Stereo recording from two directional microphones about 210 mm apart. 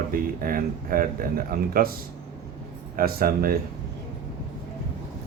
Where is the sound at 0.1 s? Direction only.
45° right (ahead or behind).